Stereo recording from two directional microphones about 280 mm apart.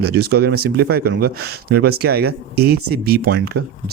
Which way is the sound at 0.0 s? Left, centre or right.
Right.